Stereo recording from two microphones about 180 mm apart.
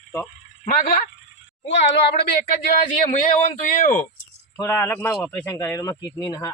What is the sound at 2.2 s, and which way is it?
Speech, 50° left (ahead or behind).